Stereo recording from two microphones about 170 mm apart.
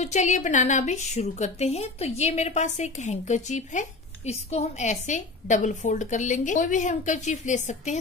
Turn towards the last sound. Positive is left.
turn(degrees=45)  # may be behind; listen again after turning